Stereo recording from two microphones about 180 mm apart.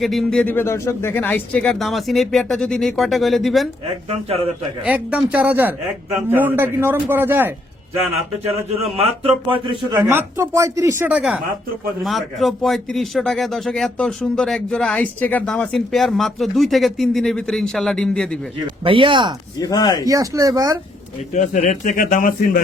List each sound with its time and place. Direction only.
0.0 s speech: centre (ahead or behind)
4.1 s a man's voice: 35° right (ahead or behind)
4.8 s a man's voice: 5° right (ahead or behind)
8.7 s a man's voice: 35° right (ahead or behind)
10.0 s a man's voice: 15° right (ahead or behind)
12.0 s speech: centre (ahead or behind)
18.9 s speech: 30° right (ahead or behind)
19.5 s speech: 20° left (ahead or behind)
20.1 s speech: 20° right (ahead or behind)
21.3 s a man's voice: 45° left (ahead or behind)